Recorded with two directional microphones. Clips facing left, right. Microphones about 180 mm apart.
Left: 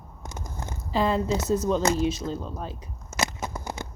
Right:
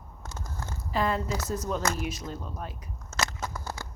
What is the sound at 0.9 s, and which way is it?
Speech, 25° left (ahead or behind).